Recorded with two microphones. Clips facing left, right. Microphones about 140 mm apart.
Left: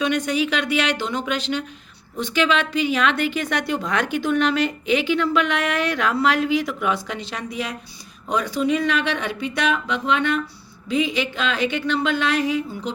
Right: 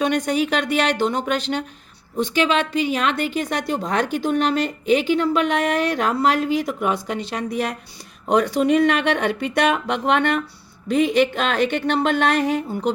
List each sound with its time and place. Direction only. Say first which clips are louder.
0.0 s a woman's voice: right 1 dB; 45° right (ahead or behind)